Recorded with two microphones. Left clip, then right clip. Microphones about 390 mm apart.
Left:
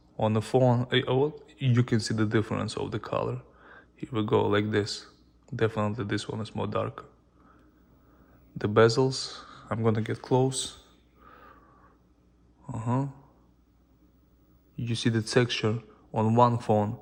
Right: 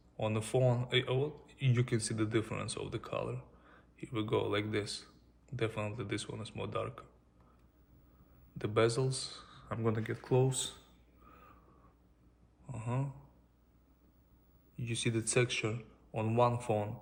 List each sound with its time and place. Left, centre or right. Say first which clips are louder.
0.2 s speech: left 8 dB; left
8.5 s speech: left 10 dB; left
14.8 s speech: left 6 dB; left